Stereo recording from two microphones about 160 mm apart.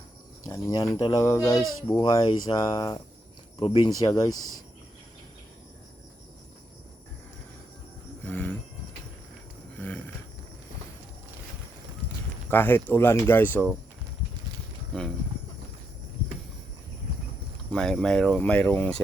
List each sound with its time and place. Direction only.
0.4 s speech: 25° left (ahead or behind)
3.8 s speech: 25° left (ahead or behind)
8.2 s a sound: 15° left (ahead or behind)
9.7 s a sound: 10° left (ahead or behind)
12.5 s speech: 15° left (ahead or behind)
14.9 s speech: 5° left (ahead or behind)
17.7 s speech: 5° left (ahead or behind)